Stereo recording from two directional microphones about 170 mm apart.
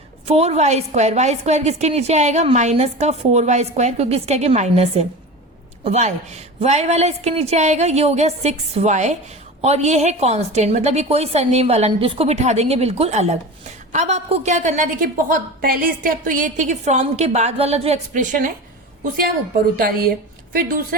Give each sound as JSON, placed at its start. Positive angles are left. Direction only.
{"t": 0.3, "sound": "a woman's voice", "side_deg": -35}
{"t": 19.7, "sound": "speech", "side_deg": -60}